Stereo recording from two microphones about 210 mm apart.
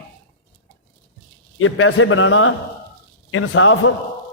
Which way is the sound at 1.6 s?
75° left (ahead or behind).